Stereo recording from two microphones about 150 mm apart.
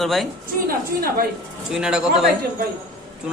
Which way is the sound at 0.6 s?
80° right.